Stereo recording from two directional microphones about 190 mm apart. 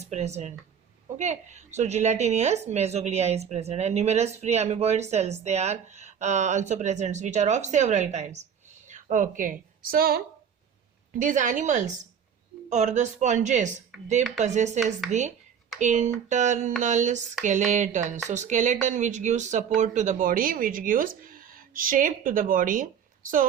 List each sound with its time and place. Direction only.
0.1 s a woman's voice: 35° right (ahead or behind)